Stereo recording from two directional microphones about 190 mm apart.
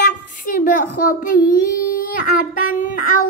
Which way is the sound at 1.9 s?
45° left (ahead or behind).